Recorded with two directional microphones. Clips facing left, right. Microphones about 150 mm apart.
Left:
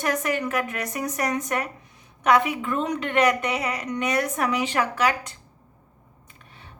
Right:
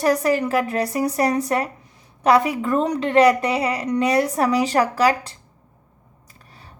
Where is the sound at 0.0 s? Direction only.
35° right (ahead or behind).